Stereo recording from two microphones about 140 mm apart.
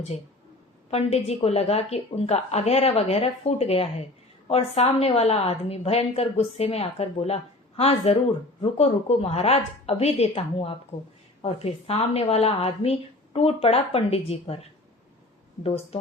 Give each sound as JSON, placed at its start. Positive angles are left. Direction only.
{"t": 0.9, "sound": "speech", "side_deg": 50}
{"t": 15.6, "sound": "speech", "side_deg": 45}